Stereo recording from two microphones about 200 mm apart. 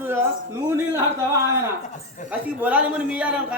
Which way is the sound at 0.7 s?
15° right (ahead or behind).